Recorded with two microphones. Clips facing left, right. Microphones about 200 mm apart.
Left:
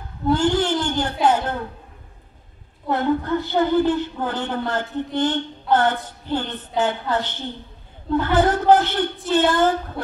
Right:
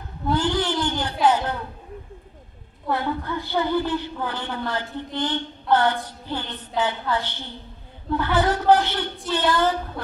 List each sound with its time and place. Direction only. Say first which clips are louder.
0.4 s a sound: left 1 dB; 50° left (ahead or behind)
1.2 s a woman's voice: even; 50° left (ahead or behind)
2.9 s a woman's voice: left 5 dB; 50° left (ahead or behind)